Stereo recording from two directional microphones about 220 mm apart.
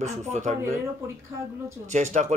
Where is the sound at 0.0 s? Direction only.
30° right (ahead or behind).